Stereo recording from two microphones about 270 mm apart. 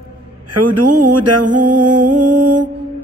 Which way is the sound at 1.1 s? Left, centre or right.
Right.